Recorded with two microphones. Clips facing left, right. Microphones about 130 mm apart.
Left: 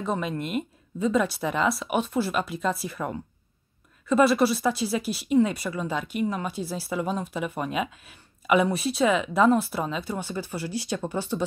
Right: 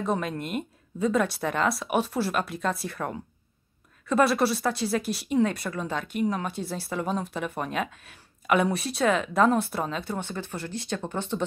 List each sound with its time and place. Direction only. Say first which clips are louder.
0.0 s speech: even; centre (ahead or behind)